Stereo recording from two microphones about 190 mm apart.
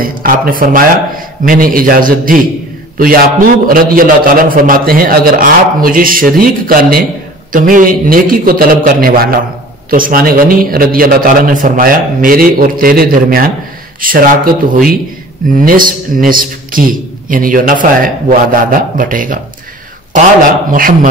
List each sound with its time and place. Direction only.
0.0 s a man's voice: 50° right (ahead or behind)